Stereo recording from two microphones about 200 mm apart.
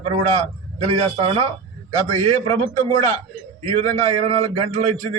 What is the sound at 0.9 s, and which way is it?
Speech, 30° right (ahead or behind).